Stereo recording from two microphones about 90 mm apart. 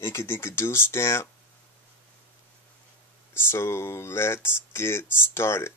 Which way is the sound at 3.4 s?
25° left (ahead or behind).